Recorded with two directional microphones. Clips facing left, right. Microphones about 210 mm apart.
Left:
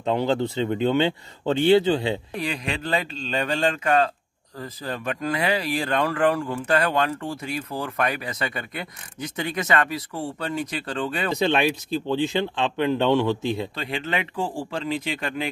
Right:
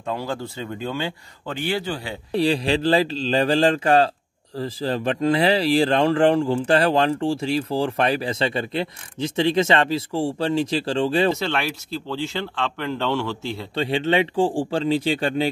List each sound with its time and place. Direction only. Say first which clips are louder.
0.0 s speech: left 5 dB; 20° left (ahead or behind)
2.3 s speech: right 9 dB; 30° right (ahead or behind)
11.3 s speech: left 4 dB; 15° left (ahead or behind)
13.7 s speech: right 8 dB; 30° right (ahead or behind)